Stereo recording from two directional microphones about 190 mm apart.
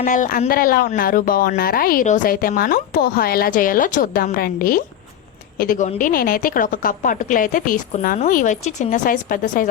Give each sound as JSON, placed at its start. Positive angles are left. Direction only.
{"t": 0.0, "sound": "speech", "side_deg": 45}